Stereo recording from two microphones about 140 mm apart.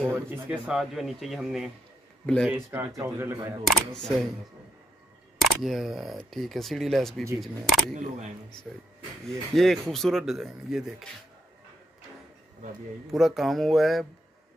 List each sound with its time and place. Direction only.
0.0 s speech: 10° right (ahead or behind)
2.2 s speech: 5° left (ahead or behind)
2.5 s speech: 15° right (ahead or behind)
3.6 s speech: centre (ahead or behind)
5.4 s speech: centre (ahead or behind)
13.1 s speech: centre (ahead or behind)